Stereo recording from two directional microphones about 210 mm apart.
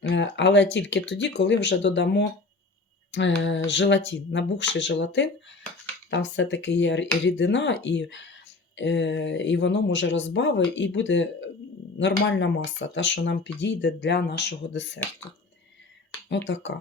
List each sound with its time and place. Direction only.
0.1 s speech: 60° left (ahead or behind)